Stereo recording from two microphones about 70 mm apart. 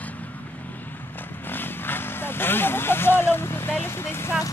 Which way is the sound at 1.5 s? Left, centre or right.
Left.